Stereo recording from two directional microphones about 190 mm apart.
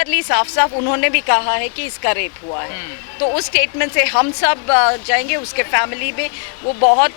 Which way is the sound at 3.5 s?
15° left (ahead or behind).